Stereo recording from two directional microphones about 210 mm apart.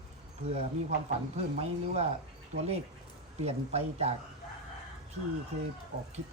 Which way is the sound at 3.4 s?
30° right (ahead or behind).